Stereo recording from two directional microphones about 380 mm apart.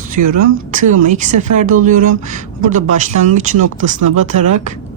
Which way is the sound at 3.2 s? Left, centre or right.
Centre.